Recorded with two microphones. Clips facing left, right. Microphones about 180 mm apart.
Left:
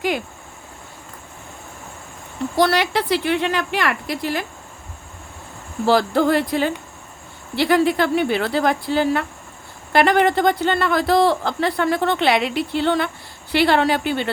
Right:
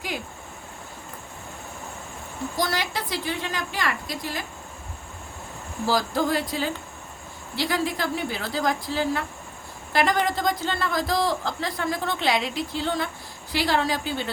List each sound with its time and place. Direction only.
2.6 s a woman's voice: 70° left (ahead or behind)
5.8 s a woman's voice: 65° left (ahead or behind)